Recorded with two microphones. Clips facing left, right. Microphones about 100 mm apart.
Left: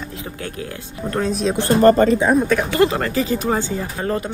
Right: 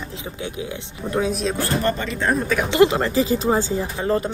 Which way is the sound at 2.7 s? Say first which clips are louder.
Right 1 dB; 20° right (ahead or behind).